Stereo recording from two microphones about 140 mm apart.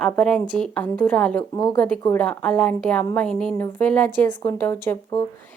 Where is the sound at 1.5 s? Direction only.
30° left (ahead or behind).